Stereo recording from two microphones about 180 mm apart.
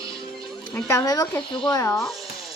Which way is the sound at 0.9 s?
20° left (ahead or behind).